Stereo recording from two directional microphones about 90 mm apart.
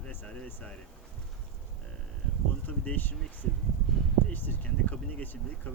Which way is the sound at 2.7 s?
20° left (ahead or behind).